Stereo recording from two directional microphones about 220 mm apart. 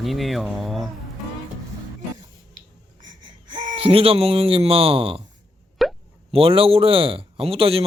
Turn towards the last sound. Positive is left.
turn(degrees=-25)  # may be behind; listen again after turning